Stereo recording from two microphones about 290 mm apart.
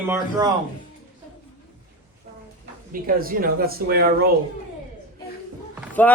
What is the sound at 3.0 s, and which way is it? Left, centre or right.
Speech, right.